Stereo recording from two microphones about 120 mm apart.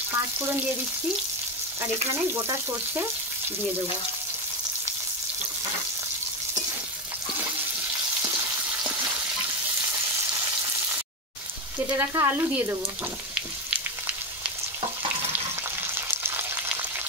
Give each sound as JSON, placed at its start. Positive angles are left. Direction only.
{"t": 0.1, "sound": "speech", "side_deg": -20}
{"t": 2.3, "sound": "speech", "side_deg": -20}
{"t": 8.2, "sound": "frying", "side_deg": -20}
{"t": 10.3, "sound": "frying", "side_deg": -20}
{"t": 12.0, "sound": "speech", "side_deg": -20}
{"t": 13.3, "sound": "frying", "side_deg": -10}
{"t": 15.9, "sound": "frying", "side_deg": -20}